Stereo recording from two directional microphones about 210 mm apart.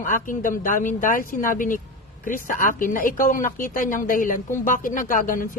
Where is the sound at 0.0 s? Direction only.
40° left (ahead or behind).